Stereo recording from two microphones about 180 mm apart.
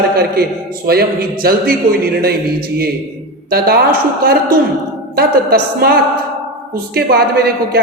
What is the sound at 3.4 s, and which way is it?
A man's voice, 60° right (ahead or behind).